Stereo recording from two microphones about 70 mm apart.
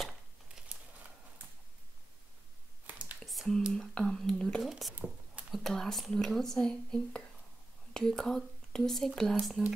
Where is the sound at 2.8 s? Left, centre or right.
Right.